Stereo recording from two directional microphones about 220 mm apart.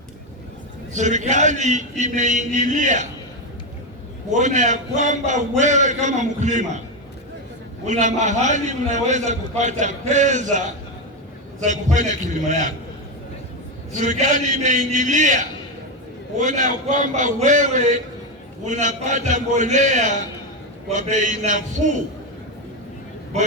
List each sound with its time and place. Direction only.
0.9 s a man's voice: 35° right (ahead or behind)
4.3 s a man's voice: 35° right (ahead or behind)
7.9 s a man's voice: 35° right (ahead or behind)
11.6 s a man's voice: 35° right (ahead or behind)
14.0 s a man's voice: 35° right (ahead or behind)